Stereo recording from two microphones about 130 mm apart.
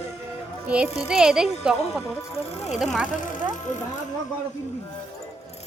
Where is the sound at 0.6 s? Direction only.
10° right (ahead or behind).